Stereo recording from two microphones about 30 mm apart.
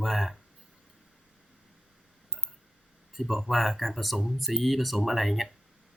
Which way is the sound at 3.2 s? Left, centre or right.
Centre.